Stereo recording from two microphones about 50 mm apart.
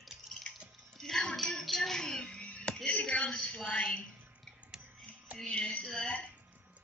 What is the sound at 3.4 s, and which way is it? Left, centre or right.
Speech, left.